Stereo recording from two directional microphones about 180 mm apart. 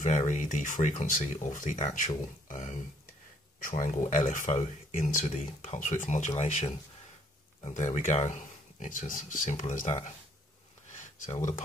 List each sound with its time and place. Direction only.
0.0 s speech: 45° left (ahead or behind)
11.2 s speech: 40° left (ahead or behind)